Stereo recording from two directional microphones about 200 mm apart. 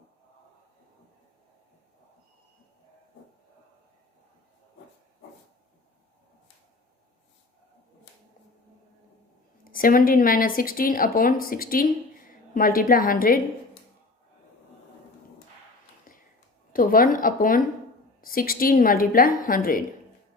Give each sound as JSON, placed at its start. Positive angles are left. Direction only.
{"t": 9.7, "sound": "a woman's voice", "side_deg": 45}
{"t": 16.1, "sound": "a sound", "side_deg": 45}
{"t": 16.7, "sound": "speech", "side_deg": 45}